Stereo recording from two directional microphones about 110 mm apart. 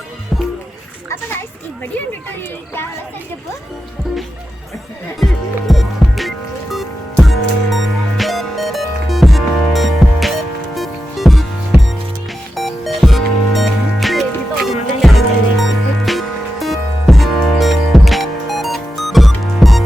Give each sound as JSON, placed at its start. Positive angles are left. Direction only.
{"t": 5.2, "sound": "music", "side_deg": 0}
{"t": 12.5, "sound": "music", "side_deg": 0}